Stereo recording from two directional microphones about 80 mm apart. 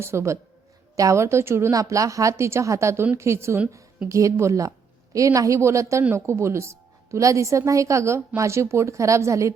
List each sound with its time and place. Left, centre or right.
0.0 s a woman's voice: right
1.7 s a woman's voice: right